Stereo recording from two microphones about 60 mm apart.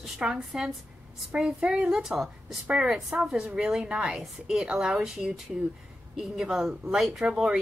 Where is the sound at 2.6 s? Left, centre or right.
Centre.